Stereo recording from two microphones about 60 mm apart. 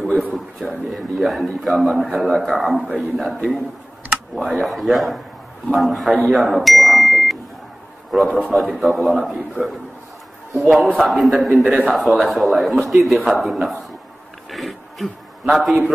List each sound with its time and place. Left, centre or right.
0.3 s speech: centre
4.4 s speech: centre
6.2 s beep: centre
8.1 s a man's voice: centre
14.5 s a sound: centre